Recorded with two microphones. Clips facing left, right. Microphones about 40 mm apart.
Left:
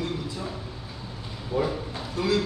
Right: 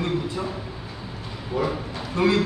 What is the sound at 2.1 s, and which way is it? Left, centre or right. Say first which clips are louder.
Speech: right 5 dB; right.